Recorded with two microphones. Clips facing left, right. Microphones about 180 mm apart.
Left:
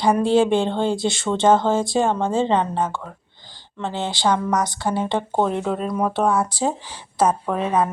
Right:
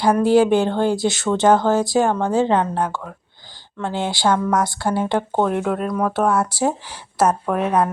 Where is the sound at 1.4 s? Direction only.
25° left (ahead or behind).